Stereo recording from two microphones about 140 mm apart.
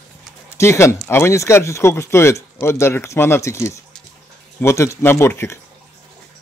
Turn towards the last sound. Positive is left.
turn(degrees=20)  # may be behind; listen again after turning